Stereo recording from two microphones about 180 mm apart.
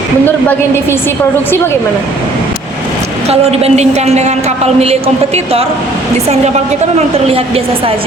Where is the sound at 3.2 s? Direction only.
35° right (ahead or behind).